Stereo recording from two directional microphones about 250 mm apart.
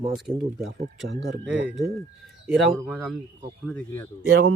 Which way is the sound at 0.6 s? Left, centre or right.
Right.